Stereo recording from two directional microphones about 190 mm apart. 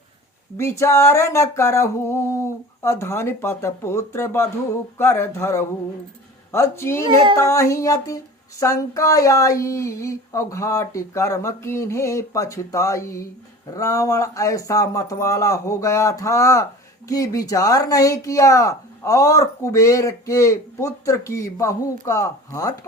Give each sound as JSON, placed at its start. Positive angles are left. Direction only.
{"t": 0.5, "sound": "speech", "side_deg": 15}
{"t": 7.0, "sound": "speech", "side_deg": -25}
{"t": 7.3, "sound": "speech", "side_deg": 15}